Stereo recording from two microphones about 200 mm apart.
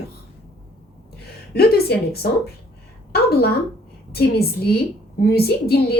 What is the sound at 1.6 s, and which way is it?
Speech, 50° left (ahead or behind).